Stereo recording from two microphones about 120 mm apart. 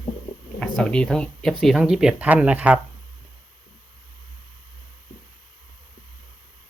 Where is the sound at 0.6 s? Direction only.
5° left (ahead or behind); by 2.8 s 10° right (ahead or behind).